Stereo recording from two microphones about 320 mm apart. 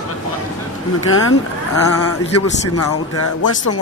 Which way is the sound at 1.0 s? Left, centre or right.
Left.